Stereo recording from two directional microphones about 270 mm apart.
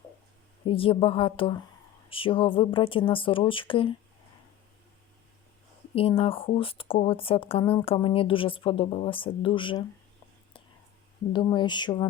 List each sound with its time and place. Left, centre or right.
0.6 s speech: centre
5.9 s speech: left
11.3 s speech: centre